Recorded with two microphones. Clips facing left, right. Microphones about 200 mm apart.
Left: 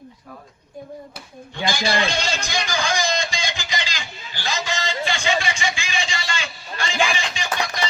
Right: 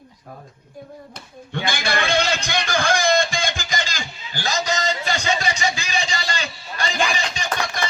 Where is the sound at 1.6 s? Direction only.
55° right (ahead or behind); by 6.9 s 35° right (ahead or behind).